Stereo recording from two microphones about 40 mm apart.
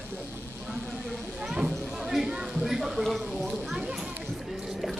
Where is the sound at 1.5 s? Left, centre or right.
Right.